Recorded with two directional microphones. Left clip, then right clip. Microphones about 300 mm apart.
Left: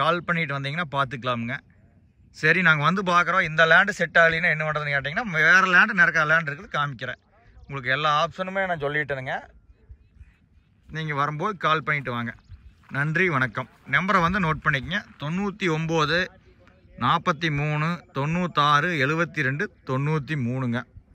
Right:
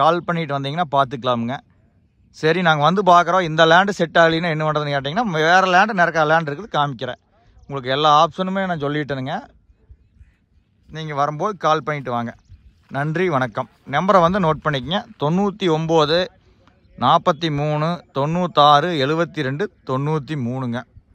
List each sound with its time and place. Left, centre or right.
0.0 s speech: centre
10.9 s a man's voice: centre